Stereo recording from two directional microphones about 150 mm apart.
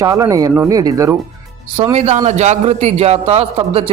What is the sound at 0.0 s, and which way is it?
Speech, 25° right (ahead or behind).